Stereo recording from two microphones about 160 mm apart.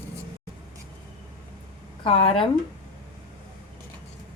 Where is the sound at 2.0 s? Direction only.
35° left (ahead or behind).